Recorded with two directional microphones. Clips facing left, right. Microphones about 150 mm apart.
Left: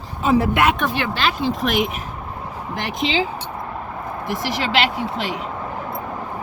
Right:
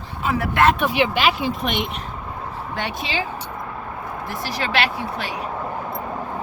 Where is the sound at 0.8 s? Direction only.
15° right (ahead or behind).